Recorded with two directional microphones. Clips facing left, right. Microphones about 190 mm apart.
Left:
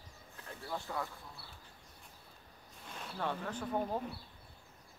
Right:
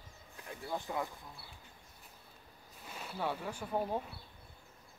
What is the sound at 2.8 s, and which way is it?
Speech, 5° right (ahead or behind).